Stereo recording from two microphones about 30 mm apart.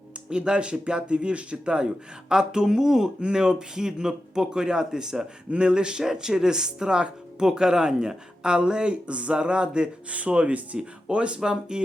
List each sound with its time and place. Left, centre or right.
0.3 s speech: right
3.2 s speech: right
9.4 s speech: right
10.1 s speech: right
11.7 s speech: right